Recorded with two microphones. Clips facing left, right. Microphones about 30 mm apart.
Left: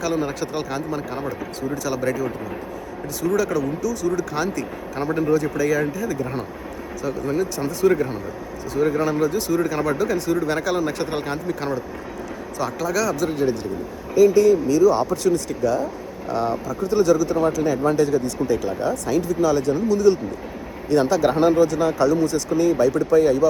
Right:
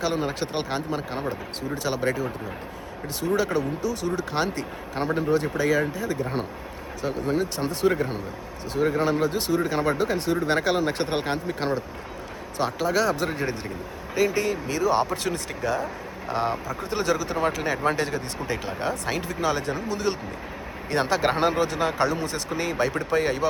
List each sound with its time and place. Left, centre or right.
0.0 s speech: right
7.9 s a man's voice: right